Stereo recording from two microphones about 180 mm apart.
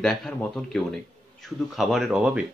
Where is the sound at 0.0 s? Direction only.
Centre (ahead or behind).